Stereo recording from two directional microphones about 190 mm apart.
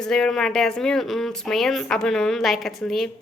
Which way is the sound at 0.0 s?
5° left (ahead or behind).